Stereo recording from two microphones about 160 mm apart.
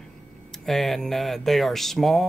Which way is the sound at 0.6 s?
Centre (ahead or behind).